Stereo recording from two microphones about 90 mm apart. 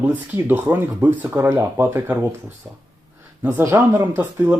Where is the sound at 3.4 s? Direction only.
25° right (ahead or behind).